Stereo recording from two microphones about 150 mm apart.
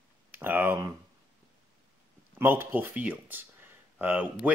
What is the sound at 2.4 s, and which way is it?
Speech, 15° right (ahead or behind).